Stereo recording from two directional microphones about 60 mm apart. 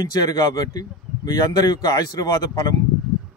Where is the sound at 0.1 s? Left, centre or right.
Left.